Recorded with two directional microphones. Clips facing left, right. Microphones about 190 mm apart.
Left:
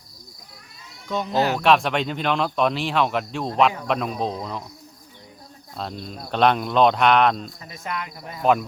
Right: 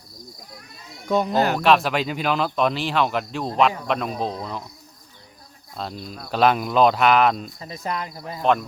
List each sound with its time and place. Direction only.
1.0 s speech: 50° right (ahead or behind)
1.5 s speech: centre (ahead or behind)
5.7 s speech: centre (ahead or behind)
7.6 s speech: 35° right (ahead or behind)